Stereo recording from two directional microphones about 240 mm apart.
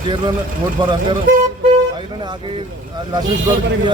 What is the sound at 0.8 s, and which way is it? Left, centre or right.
Speech, centre.